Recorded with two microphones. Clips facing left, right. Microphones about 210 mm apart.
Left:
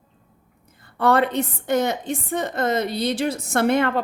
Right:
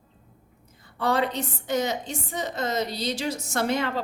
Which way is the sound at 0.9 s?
55° left (ahead or behind).